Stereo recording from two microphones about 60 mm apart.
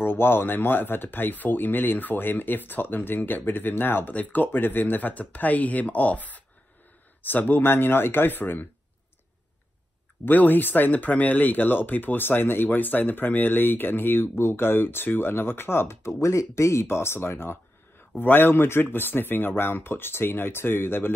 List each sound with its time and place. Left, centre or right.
0.0 s speech: left
10.2 s speech: left